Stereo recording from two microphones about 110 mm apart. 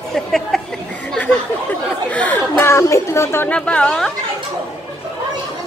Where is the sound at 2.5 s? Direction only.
25° left (ahead or behind).